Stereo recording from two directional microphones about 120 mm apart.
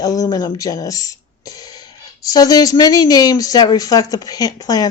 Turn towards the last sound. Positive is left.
turn(degrees=30)  # may be behind; listen again after turning